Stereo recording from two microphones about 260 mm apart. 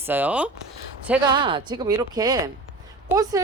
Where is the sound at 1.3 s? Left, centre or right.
Centre.